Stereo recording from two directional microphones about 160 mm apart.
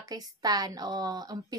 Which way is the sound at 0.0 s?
25° right (ahead or behind).